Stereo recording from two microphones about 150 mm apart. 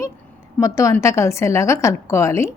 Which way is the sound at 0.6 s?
20° left (ahead or behind).